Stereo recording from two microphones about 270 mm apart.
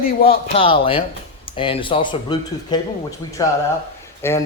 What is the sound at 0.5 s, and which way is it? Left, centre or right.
Speech, centre.